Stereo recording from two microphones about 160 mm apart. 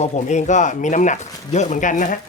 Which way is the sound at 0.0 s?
45° left (ahead or behind).